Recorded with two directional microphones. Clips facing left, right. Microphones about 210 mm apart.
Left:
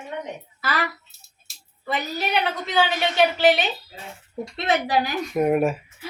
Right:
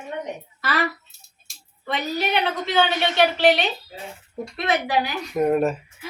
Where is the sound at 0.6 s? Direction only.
Centre (ahead or behind).